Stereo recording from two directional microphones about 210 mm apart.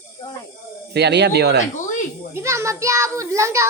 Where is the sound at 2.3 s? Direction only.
15° right (ahead or behind).